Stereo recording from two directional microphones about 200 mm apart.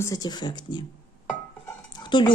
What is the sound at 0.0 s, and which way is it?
Speech, 20° left (ahead or behind).